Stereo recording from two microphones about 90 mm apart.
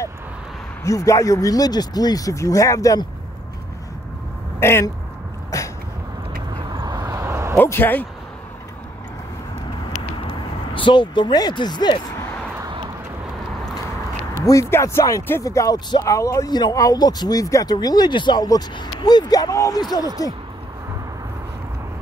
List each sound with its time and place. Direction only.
0.8 s speech: 35° left (ahead or behind)
4.6 s speech: 30° left (ahead or behind)
5.5 s sneeze: 40° left (ahead or behind)
6.7 s vehicle: 50° right (ahead or behind); by 7.5 s 30° right (ahead or behind)
7.5 s speech: 25° left (ahead or behind)
9.9 s vehicle: 70° left (ahead or behind)
14.4 s speech: 35° left (ahead or behind); by 20.1 s 50° left (ahead or behind)